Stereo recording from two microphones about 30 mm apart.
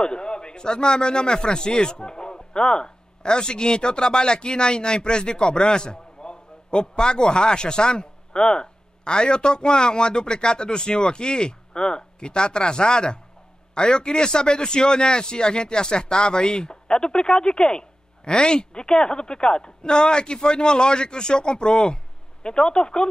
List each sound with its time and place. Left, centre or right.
0.0 s a man's voice: left